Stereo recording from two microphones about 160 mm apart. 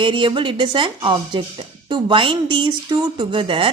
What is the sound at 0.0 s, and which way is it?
Speech, 30° right (ahead or behind).